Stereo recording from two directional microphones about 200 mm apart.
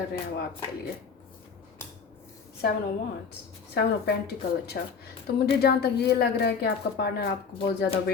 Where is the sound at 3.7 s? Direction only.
50° left (ahead or behind).